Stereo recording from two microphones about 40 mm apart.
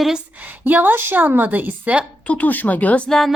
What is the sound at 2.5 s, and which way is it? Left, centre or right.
Speech, left.